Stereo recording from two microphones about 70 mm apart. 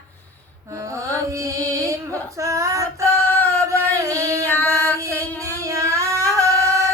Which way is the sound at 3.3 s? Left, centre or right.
Left.